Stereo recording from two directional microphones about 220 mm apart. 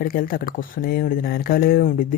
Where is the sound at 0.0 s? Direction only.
40° left (ahead or behind).